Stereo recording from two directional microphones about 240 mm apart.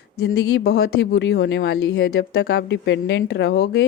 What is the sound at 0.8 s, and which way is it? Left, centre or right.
A woman's voice, left.